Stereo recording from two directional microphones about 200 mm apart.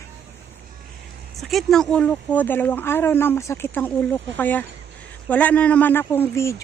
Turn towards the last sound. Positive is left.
turn(degrees=15)  # may be behind; listen again after turning